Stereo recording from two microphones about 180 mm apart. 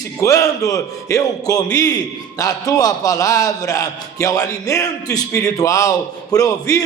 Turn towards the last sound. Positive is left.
turn(degrees=20)  # may be behind; listen again after turning